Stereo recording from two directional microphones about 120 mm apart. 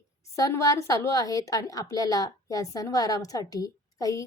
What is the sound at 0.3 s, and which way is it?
A woman's voice, 25° left (ahead or behind).